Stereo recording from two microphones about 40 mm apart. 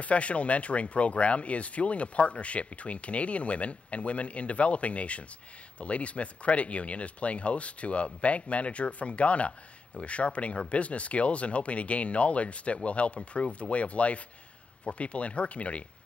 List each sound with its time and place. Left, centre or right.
0.0 s speech: left